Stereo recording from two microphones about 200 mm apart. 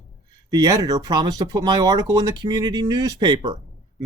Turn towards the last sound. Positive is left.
turn(degrees=-20)  # may be behind; listen again after turning